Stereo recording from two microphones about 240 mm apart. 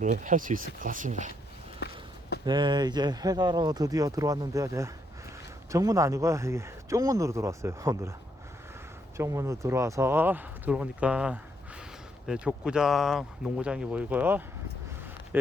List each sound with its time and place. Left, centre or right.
0.0 s speech: right
1.8 s walk: left
2.4 s speech: centre
9.1 s speech: centre